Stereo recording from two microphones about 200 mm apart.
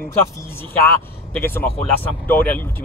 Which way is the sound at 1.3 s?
10° left (ahead or behind).